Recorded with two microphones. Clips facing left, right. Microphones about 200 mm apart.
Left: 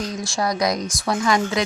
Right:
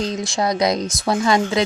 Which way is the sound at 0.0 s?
25° right (ahead or behind).